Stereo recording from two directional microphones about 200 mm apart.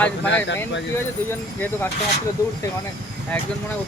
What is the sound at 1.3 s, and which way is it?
Speech, 10° left (ahead or behind).